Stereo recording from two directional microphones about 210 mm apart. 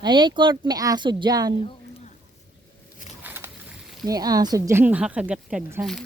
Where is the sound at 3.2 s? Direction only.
10° right (ahead or behind).